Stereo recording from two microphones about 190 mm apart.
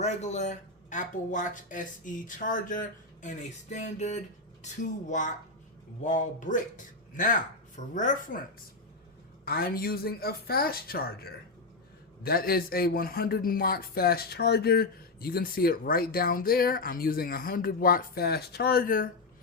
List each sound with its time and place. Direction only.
0.0 s speech: 35° left (ahead or behind)
9.4 s speech: 50° left (ahead or behind)